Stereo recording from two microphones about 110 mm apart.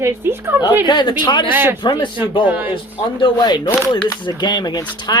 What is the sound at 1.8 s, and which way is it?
Speech, 45° left (ahead or behind).